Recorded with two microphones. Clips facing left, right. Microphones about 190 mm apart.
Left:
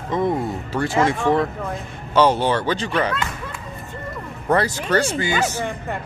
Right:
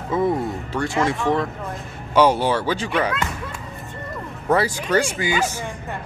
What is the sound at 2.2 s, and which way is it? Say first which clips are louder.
Speech: even; 10° right (ahead or behind).